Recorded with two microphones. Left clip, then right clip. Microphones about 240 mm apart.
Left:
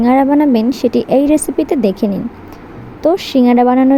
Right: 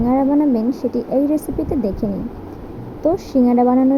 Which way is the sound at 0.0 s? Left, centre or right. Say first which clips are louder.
Left 5 dB; left.